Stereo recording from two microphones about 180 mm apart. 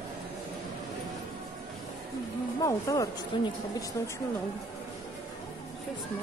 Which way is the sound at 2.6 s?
20° left (ahead or behind).